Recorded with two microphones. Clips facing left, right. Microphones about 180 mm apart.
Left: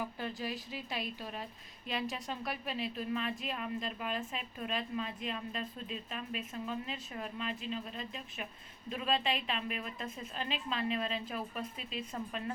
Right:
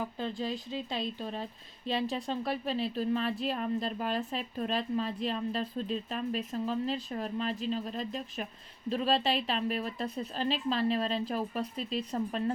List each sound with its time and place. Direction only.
0.2 s a woman's voice: 25° right (ahead or behind)